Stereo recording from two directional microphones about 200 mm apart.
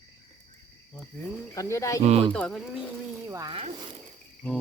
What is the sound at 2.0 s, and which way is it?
Speech, 30° right (ahead or behind).